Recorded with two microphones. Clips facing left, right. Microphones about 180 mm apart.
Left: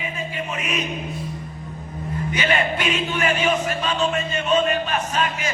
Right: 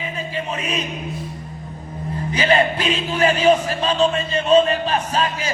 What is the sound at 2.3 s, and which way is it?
A man's voice, 35° right (ahead or behind).